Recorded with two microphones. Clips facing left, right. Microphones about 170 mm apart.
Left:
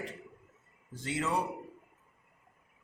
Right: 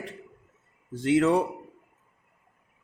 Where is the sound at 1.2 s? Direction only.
65° right (ahead or behind).